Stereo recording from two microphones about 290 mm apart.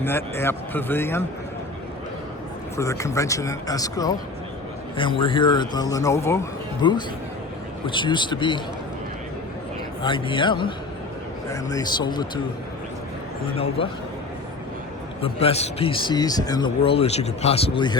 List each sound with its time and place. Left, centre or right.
0.0 s speech: centre
2.7 s speech: centre
10.0 s speech: centre
13.8 s speech: centre
15.2 s speech: centre